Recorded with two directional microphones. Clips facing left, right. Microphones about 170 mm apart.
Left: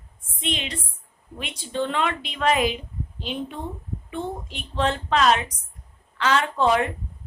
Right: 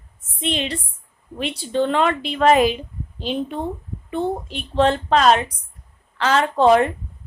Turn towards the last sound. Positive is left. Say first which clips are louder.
# right 6 dB
turn(degrees=-40)  # may be behind; listen again after turning